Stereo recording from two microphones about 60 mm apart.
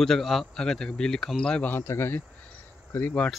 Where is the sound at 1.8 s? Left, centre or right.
Left.